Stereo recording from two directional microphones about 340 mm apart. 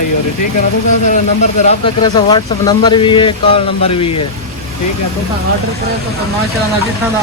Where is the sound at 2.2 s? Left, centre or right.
Centre.